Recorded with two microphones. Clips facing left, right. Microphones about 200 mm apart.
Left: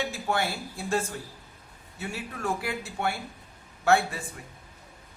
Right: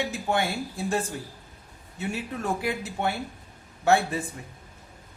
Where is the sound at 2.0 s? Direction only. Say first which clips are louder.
Right 4 dB; 20° right (ahead or behind).